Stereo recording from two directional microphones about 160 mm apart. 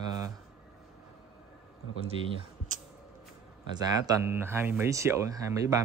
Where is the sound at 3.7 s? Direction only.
20° right (ahead or behind).